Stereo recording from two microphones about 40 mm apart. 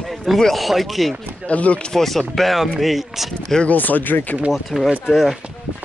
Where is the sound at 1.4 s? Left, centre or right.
Left.